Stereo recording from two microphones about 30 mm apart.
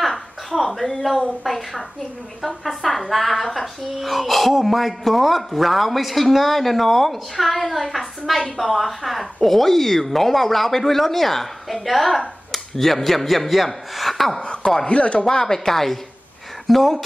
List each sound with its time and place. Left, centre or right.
0.0 s a sound: centre
1.4 s a woman's voice: centre
14.9 s chopping: left
15.2 s a woman's voice: centre
16.6 s speech: centre